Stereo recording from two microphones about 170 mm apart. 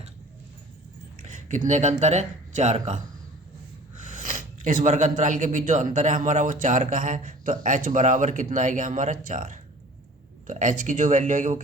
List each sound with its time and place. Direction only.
1.2 s speech: 45° right (ahead or behind)
4.0 s speech: 50° right (ahead or behind)